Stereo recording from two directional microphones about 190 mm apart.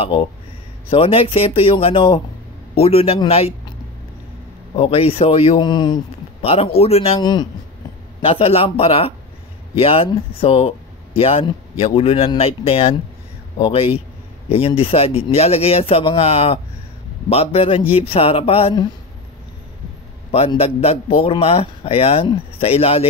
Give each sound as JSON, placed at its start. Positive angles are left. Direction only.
{"t": 0.0, "sound": "speech", "side_deg": 25}
{"t": 4.7, "sound": "speech", "side_deg": 30}
{"t": 20.2, "sound": "speech", "side_deg": 30}